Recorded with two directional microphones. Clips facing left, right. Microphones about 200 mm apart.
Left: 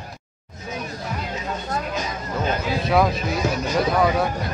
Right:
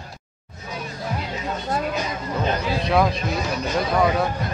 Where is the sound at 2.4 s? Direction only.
Centre (ahead or behind).